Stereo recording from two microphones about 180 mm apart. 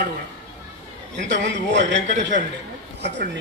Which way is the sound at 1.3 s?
80° right.